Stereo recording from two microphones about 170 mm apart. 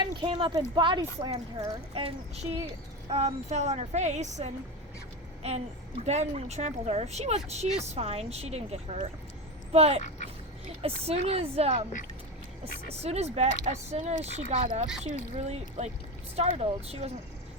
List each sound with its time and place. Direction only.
0.0 s speech: 30° right (ahead or behind)
5.4 s a sound: 40° right (ahead or behind)
6.1 s speech: 40° right (ahead or behind)
12.9 s speech: 40° right (ahead or behind)